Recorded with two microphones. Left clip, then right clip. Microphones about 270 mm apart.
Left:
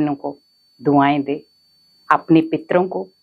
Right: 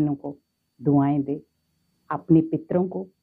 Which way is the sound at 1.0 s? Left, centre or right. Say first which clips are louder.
Left 8 dB; centre.